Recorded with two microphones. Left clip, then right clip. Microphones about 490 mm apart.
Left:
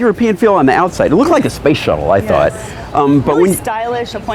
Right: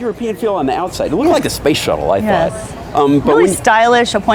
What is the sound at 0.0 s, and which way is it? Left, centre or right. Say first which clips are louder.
Speech: left 6 dB; left.